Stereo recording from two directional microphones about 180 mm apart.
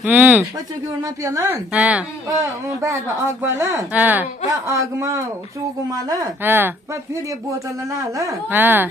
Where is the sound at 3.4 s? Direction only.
15° right (ahead or behind).